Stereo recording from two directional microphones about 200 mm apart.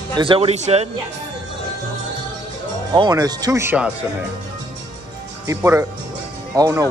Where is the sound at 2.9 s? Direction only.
20° right (ahead or behind).